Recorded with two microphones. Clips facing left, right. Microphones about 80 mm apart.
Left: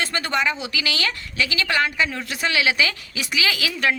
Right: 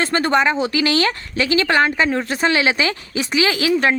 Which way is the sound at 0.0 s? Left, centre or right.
Right.